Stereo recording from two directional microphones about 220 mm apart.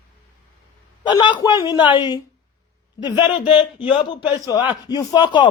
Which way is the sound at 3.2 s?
20° left (ahead or behind).